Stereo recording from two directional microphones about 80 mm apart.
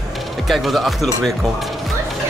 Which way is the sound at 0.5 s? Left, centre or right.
Centre.